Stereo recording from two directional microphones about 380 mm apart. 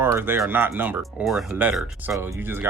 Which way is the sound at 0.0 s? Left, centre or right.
Centre.